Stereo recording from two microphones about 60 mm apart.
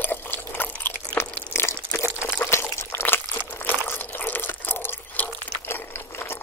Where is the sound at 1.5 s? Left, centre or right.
Left.